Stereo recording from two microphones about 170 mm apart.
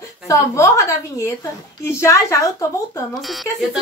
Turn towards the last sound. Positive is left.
turn(degrees=0)  # may be behind; listen again after turning